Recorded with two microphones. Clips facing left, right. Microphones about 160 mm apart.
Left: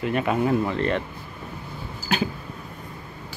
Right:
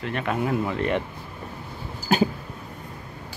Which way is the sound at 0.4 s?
5° right (ahead or behind).